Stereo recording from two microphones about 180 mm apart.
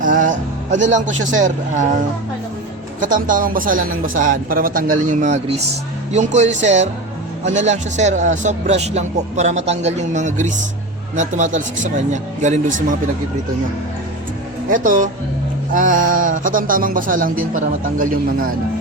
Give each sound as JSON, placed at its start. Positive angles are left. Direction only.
{"t": 0.0, "sound": "a man's voice", "side_deg": -45}
{"t": 3.0, "sound": "speech", "side_deg": -45}
{"t": 14.7, "sound": "speech", "side_deg": -45}